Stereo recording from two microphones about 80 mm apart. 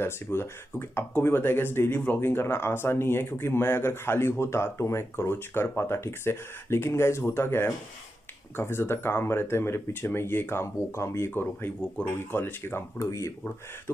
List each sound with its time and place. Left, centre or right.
0.0 s speech: left